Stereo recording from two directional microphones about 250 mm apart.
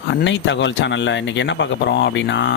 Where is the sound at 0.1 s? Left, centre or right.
Left.